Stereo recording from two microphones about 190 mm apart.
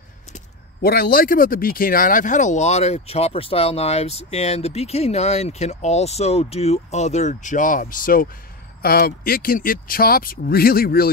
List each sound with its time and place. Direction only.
0.8 s speech: 55° left (ahead or behind)